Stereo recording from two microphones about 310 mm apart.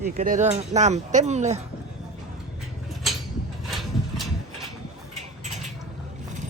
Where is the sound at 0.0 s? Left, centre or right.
Right.